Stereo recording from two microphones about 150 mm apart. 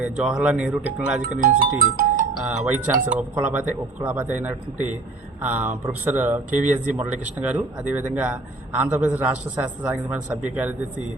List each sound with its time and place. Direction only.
0.0 s speech: 5° right (ahead or behind)
1.4 s speech: 65° right (ahead or behind)
2.4 s speech: 10° right (ahead or behind)